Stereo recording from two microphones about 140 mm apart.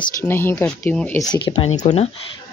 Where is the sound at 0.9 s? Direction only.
5° left (ahead or behind).